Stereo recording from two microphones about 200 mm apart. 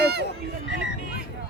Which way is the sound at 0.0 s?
55° right (ahead or behind).